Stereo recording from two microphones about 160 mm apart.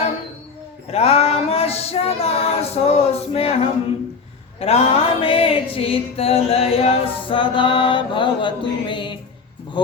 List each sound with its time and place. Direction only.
0.9 s female singing: 40° left (ahead or behind)
4.6 s music: 40° left (ahead or behind)